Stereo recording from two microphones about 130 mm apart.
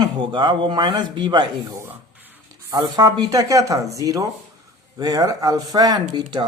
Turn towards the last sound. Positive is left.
turn(degrees=-35)  # may be behind; listen again after turning